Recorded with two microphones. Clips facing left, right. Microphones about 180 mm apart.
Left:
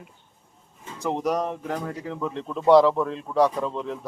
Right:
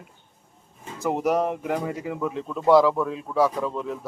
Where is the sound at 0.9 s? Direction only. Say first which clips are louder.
Right 2 dB; 5° right (ahead or behind).